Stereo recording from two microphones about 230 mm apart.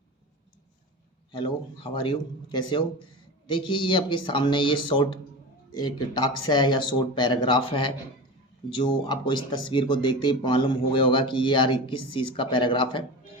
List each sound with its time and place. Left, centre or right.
1.3 s speech: left